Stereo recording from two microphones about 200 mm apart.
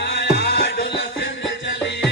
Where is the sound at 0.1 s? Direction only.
55° left (ahead or behind).